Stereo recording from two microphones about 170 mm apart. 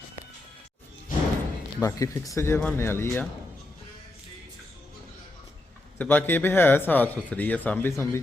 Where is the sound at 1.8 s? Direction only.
20° left (ahead or behind).